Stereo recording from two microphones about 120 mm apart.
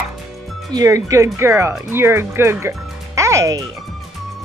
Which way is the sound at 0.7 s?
30° right (ahead or behind).